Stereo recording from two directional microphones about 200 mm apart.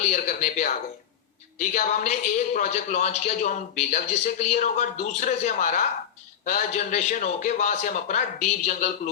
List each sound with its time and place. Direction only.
0.1 s speech: 35° left (ahead or behind)
1.7 s speech: 35° left (ahead or behind)